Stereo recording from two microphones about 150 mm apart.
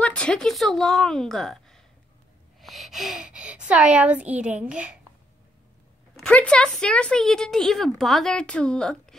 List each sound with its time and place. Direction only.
0.0 s a woman's voice: 5° left (ahead or behind)
6.1 s speech: 5° left (ahead or behind)